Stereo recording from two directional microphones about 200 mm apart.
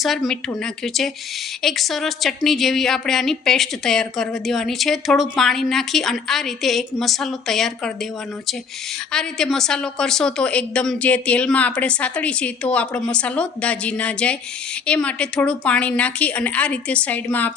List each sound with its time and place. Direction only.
0.0 s a woman's voice: centre (ahead or behind)
9.1 s a woman's voice: centre (ahead or behind)